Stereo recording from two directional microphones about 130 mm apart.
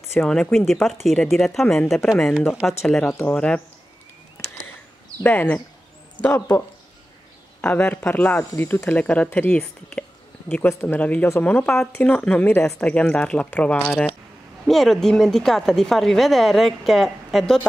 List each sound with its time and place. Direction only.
0.2 s a woman's voice: 5° left (ahead or behind)
5.2 s speech: 10° left (ahead or behind)
7.6 s a woman's voice: 15° left (ahead or behind)